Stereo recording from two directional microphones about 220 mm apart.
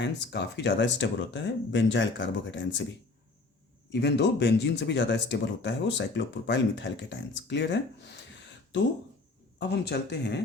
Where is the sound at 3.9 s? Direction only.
50° left (ahead or behind).